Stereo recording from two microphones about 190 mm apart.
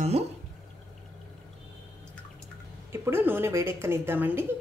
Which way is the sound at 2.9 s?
15° right (ahead or behind).